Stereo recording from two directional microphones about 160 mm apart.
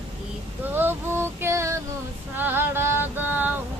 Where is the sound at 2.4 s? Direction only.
10° right (ahead or behind).